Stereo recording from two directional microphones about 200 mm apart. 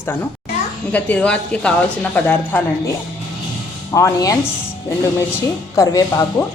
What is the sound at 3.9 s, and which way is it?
Speech, 15° left (ahead or behind).